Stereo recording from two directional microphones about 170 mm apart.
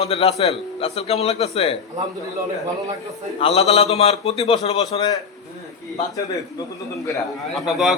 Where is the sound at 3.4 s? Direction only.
35° left (ahead or behind).